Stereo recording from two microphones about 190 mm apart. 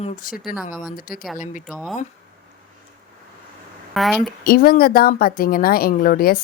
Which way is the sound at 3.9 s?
Centre (ahead or behind).